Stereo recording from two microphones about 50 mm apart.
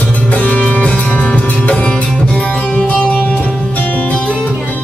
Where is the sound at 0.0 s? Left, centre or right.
Left.